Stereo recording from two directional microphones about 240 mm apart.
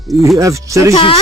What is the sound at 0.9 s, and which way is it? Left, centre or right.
Speech, left.